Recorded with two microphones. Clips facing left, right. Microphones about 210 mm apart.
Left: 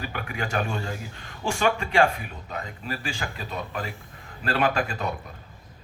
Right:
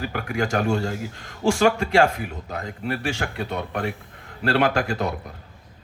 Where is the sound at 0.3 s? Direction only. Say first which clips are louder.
Right 7 dB; 75° right (ahead or behind).